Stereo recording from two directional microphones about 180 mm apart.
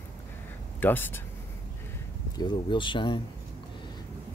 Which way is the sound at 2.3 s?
25° left (ahead or behind).